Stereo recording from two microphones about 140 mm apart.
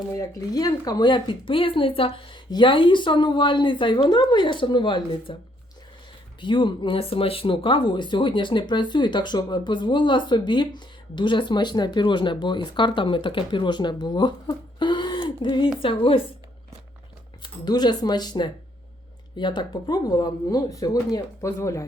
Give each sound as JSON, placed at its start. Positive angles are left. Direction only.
{"t": 0.1, "sound": "speech", "side_deg": 25}
{"t": 6.4, "sound": "speech", "side_deg": 35}
{"t": 17.4, "sound": "speech", "side_deg": 30}